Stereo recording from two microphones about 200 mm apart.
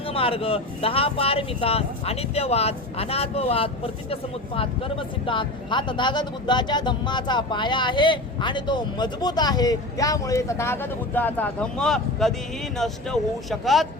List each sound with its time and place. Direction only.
0.1 s speech: 30° left (ahead or behind); by 13.8 s centre (ahead or behind)